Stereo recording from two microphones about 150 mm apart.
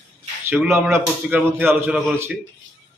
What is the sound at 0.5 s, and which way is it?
Speech, 15° right (ahead or behind).